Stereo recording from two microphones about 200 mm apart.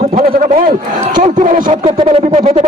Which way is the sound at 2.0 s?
30° right (ahead or behind).